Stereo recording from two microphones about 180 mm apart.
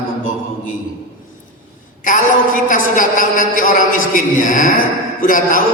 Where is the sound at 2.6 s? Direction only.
45° left (ahead or behind).